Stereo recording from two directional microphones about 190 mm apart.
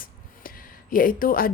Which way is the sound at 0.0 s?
50° left (ahead or behind).